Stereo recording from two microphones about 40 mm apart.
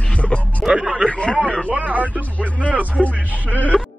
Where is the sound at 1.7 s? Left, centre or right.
Right.